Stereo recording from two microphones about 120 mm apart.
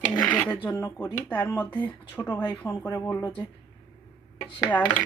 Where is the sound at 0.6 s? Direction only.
30° left (ahead or behind).